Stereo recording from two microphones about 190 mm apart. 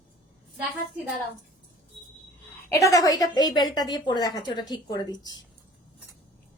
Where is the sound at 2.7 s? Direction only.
15° left (ahead or behind).